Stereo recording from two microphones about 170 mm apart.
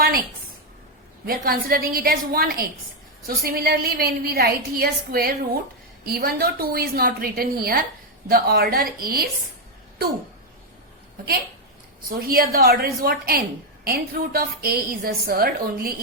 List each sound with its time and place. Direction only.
0.0 s a sound: 60° right (ahead or behind)
1.2 s a woman's voice: 60° right (ahead or behind)
12.0 s a woman's voice: 65° right (ahead or behind)